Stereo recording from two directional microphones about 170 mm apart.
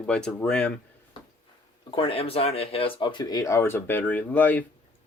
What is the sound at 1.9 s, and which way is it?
Speech, 30° left (ahead or behind).